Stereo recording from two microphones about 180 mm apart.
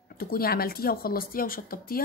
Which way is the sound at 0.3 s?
55° left (ahead or behind).